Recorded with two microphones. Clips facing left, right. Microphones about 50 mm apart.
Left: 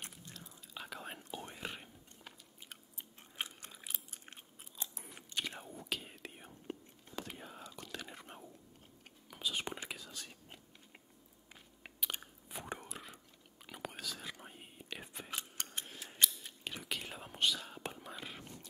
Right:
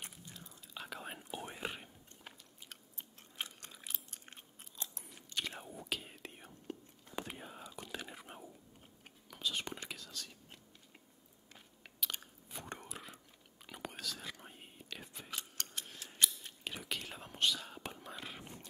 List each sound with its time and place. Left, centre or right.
0.0 s whispering: centre
1.3 s whispering: centre
2.7 s chewing: centre
5.4 s whispering: centre
7.2 s whispering: centre
9.3 s whispering: centre
11.8 s biting: centre
13.7 s whispering: centre
14.9 s whispering: centre
15.9 s scissors: centre
16.2 s whispering: centre